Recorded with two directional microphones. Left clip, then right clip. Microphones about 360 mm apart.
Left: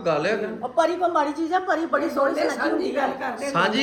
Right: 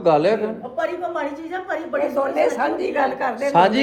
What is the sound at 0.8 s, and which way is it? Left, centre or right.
Speech, left.